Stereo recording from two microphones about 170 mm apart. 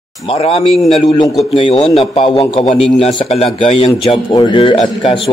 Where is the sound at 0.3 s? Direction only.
35° left (ahead or behind).